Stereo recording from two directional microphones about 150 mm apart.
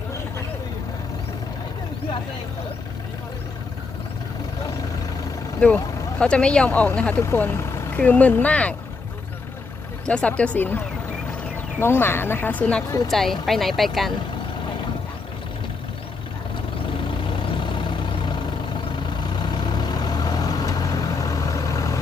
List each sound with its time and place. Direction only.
5.5 s speech: 5° left (ahead or behind)
10.1 s speech: 10° left (ahead or behind)
17.1 s vehicle: 35° left (ahead or behind)